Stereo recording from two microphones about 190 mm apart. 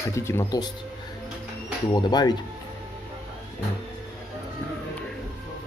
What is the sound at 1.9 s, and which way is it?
Speech, 20° left (ahead or behind).